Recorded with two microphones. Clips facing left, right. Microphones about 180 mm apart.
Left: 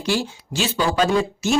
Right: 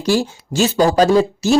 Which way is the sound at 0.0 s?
45° right (ahead or behind).